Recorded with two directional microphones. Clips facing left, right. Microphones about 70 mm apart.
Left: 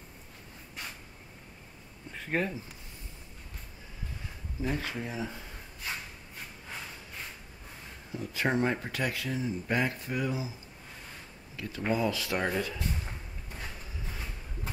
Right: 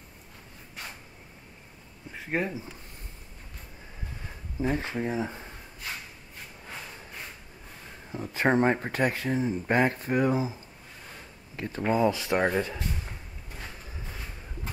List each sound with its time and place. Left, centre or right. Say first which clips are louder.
2.1 s speech: right 1 dB; centre
4.6 s speech: right 5 dB; right
8.1 s speech: right 5 dB; right
11.5 s speech: right 4 dB; right